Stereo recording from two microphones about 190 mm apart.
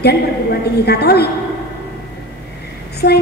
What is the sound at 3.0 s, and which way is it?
Speech, 60° left (ahead or behind).